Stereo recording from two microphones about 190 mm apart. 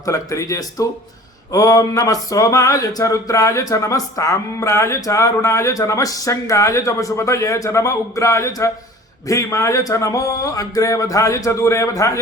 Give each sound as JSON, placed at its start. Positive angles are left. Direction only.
{"t": 0.0, "sound": "speech", "side_deg": 15}